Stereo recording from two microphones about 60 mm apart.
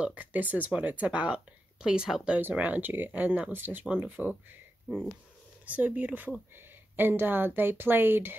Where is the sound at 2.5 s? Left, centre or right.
Right.